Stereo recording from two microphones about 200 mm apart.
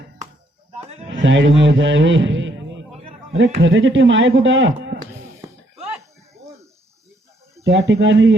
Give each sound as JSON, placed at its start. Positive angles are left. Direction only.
{"t": 0.8, "sound": "music", "side_deg": -30}
{"t": 1.2, "sound": "a man's voice", "side_deg": -70}
{"t": 3.6, "sound": "a man's voice", "side_deg": -70}
{"t": 7.6, "sound": "speech", "side_deg": -60}